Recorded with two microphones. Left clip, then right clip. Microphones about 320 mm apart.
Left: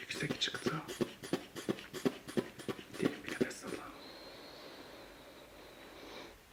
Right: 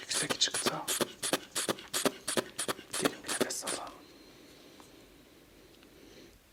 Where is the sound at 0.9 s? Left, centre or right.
Right.